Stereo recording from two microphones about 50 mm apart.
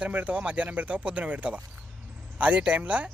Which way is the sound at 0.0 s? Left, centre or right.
Right.